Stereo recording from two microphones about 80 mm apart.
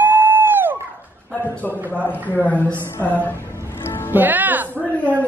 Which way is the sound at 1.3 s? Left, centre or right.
Left.